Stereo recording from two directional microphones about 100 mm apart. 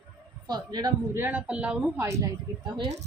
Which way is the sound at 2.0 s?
30° right (ahead or behind).